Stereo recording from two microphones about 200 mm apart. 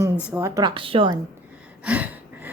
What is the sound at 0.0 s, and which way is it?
A woman's voice, 10° right (ahead or behind).